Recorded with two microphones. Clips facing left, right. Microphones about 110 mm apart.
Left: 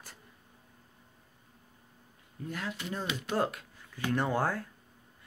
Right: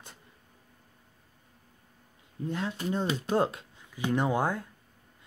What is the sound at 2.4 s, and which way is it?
Speech, 25° right (ahead or behind).